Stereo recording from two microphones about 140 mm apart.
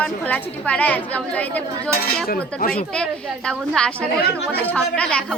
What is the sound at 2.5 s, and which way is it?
Speech, 90° left.